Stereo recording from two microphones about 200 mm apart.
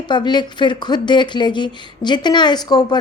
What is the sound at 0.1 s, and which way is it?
Speech, 20° left (ahead or behind).